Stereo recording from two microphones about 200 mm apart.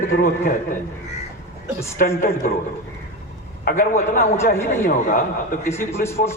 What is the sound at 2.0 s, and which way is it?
Speech, 45° left (ahead or behind).